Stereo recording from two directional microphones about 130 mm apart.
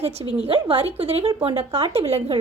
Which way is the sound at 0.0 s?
50° right (ahead or behind).